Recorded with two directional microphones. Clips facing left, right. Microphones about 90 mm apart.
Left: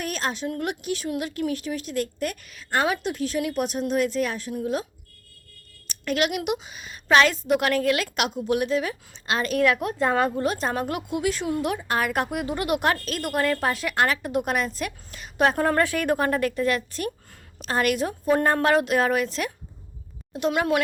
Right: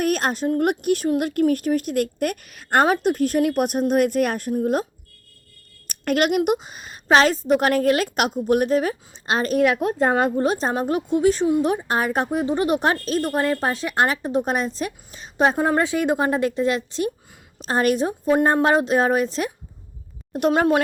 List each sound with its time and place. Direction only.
0.0 s a sound: 55° right (ahead or behind)
0.6 s a woman's voice: 55° right (ahead or behind)
5.9 s speech: 50° right (ahead or behind)
9.6 s a woman's voice: 25° right (ahead or behind)
17.6 s speech: 35° right (ahead or behind)
20.5 s speech: 35° right (ahead or behind)